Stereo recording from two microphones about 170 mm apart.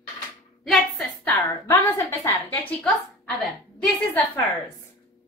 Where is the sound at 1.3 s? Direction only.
20° left (ahead or behind).